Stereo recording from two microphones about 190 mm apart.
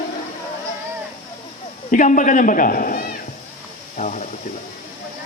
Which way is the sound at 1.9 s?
45° left (ahead or behind).